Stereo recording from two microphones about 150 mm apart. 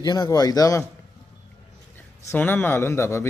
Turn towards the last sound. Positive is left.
turn(degrees=15)  # may be behind; listen again after turning